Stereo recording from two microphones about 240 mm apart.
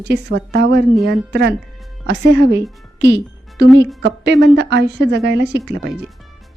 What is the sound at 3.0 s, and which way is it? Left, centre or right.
Music, right.